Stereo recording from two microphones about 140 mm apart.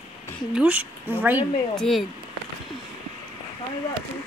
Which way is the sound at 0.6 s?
10° right (ahead or behind).